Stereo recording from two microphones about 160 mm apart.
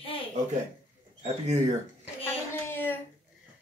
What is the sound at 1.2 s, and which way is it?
Speech, 45° right (ahead or behind).